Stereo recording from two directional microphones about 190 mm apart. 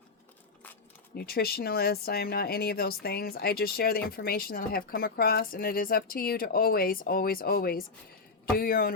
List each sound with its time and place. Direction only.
1.1 s speech: 55° left (ahead or behind)